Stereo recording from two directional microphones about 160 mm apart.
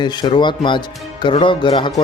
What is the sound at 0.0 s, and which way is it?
Speech, 30° left (ahead or behind).